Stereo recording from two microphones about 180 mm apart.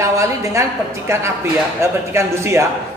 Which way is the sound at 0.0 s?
15° right (ahead or behind).